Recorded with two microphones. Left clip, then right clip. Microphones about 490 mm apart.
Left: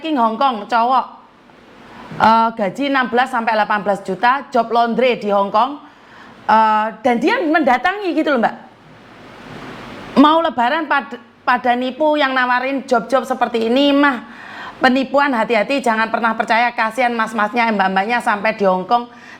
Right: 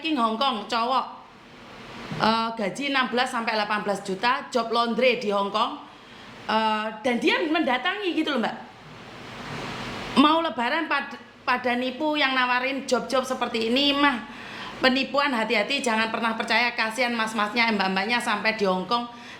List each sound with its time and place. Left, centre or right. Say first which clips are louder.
0.0 s a woman's voice: left 8 dB; centre
2.1 s a woman's voice: left 11 dB; centre
10.2 s a woman's voice: left 8 dB; centre